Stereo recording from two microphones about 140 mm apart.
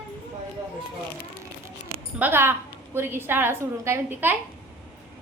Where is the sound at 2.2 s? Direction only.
15° right (ahead or behind).